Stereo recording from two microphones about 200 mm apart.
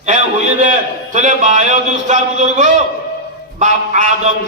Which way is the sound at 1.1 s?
40° right (ahead or behind).